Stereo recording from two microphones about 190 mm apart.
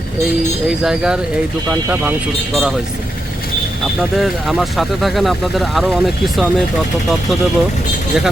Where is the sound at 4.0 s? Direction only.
Centre (ahead or behind).